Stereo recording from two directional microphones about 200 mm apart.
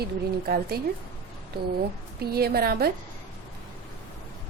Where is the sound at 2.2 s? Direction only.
50° right (ahead or behind).